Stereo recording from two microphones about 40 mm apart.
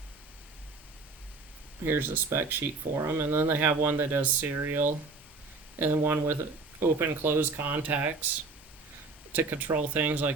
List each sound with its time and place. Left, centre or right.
1.8 s speech: right
4.2 s speech: right
4.5 s speech: right
5.8 s speech: right
7.6 s speech: right
9.3 s speech: right
9.7 s speech: right